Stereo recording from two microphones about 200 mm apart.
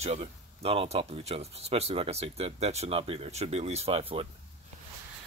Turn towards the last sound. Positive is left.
turn(degrees=-30)  # may be behind; listen again after turning